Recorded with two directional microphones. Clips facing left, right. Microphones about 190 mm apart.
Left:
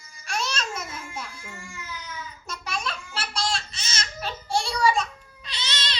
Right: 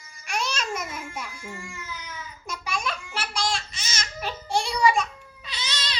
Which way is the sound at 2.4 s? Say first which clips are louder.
Right 2 dB; 10° right (ahead or behind).